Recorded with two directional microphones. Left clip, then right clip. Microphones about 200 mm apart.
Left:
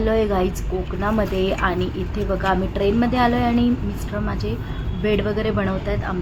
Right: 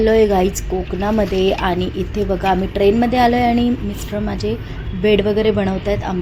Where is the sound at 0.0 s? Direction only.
20° right (ahead or behind).